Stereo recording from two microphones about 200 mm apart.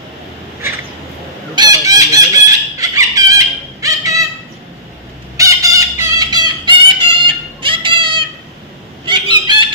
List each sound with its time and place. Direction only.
1.5 s chicken: 20° right (ahead or behind)
5.4 s music: 15° right (ahead or behind)
9.0 s fowl: 25° right (ahead or behind)